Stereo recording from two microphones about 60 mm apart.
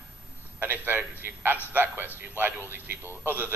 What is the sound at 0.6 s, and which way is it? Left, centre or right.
A man's voice, right.